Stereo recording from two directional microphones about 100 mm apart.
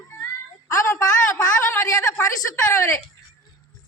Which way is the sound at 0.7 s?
30° left (ahead or behind).